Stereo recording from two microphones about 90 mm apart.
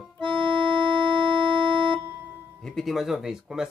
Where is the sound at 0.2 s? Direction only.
65° right (ahead or behind).